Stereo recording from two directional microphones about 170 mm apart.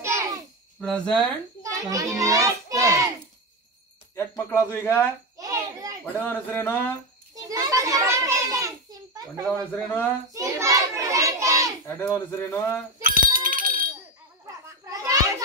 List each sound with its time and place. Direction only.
0.0 s a sound: 15° right (ahead or behind)
0.7 s speech: 5° left (ahead or behind)
1.6 s children playing: 20° right (ahead or behind)
4.1 s speech: 15° left (ahead or behind)
5.4 s a sound: 20° right (ahead or behind)
6.2 s speech: 10° left (ahead or behind)
7.3 s children playing: 20° right (ahead or behind)
9.4 s speech: 5° left (ahead or behind)
10.3 s children playing: 20° right (ahead or behind)
12.0 s speech: 15° left (ahead or behind)
13.0 s bicycle bell: 55° right (ahead or behind)
14.4 s a sound: 20° right (ahead or behind)